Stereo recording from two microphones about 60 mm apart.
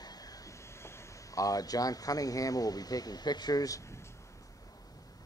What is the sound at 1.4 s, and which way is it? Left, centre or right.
Speech, left.